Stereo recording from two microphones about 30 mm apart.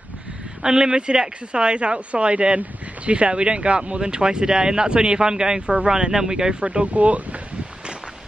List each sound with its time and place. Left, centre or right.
0.6 s speech: right
6.5 s speech: right